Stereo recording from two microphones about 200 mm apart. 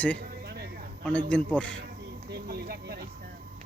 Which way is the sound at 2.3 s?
50° right (ahead or behind).